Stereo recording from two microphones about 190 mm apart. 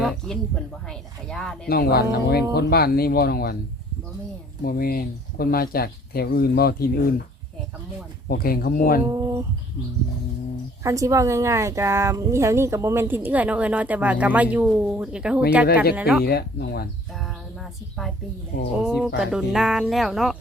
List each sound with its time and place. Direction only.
0.0 s a sound: centre (ahead or behind)
0.9 s speech: 5° left (ahead or behind)
1.6 s speech: 55° left (ahead or behind)
4.6 s speech: 50° left (ahead or behind)
8.3 s speech: 50° left (ahead or behind)
9.0 s speech: 20° right (ahead or behind)
10.8 s a woman's voice: 15° right (ahead or behind)
16.2 s speech: 55° left (ahead or behind)
17.2 s a sound: centre (ahead or behind)
18.5 s speech: 50° left (ahead or behind)
18.9 s speech: centre (ahead or behind)